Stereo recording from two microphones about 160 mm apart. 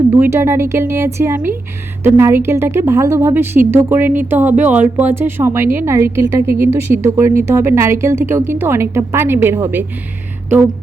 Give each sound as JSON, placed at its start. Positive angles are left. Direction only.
{"t": 0.1, "sound": "speech", "side_deg": -15}